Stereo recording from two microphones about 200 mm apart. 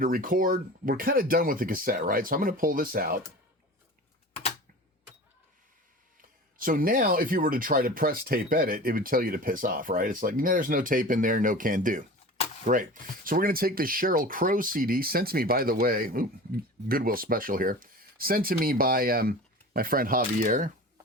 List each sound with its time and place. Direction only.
0.0 s speech: 45° right (ahead or behind)
6.6 s speech: 45° right (ahead or behind)